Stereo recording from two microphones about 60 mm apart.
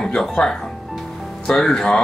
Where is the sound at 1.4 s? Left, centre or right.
Centre.